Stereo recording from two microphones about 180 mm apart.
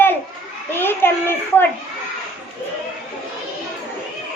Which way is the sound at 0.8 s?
10° left (ahead or behind).